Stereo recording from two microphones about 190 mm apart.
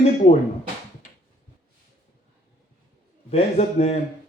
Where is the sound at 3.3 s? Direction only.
35° left (ahead or behind).